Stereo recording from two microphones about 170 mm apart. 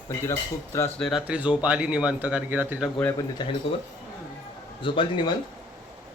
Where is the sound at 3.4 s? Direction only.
25° left (ahead or behind).